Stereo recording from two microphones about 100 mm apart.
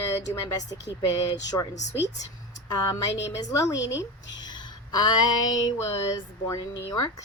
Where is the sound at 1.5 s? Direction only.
40° left (ahead or behind).